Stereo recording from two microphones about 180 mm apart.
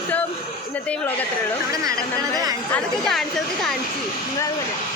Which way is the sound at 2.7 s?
Centre (ahead or behind).